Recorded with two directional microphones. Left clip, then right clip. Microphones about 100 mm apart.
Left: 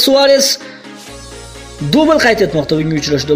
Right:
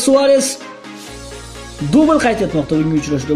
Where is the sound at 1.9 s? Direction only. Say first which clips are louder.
Left 3 dB; 50° left (ahead or behind).